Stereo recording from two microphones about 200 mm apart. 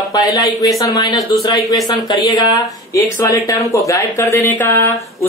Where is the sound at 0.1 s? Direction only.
20° left (ahead or behind).